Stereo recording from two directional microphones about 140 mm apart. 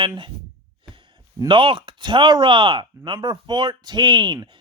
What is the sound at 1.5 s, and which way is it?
Speech, 40° right (ahead or behind).